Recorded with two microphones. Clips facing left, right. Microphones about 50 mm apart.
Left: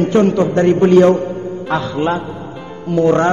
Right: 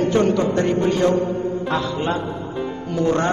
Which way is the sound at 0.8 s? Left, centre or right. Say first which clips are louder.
Left 12 dB; left.